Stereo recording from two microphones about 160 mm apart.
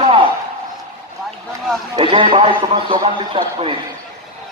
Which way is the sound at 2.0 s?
30° right (ahead or behind).